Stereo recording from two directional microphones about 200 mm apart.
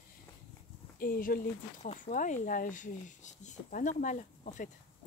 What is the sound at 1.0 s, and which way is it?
Speech, 45° left (ahead or behind).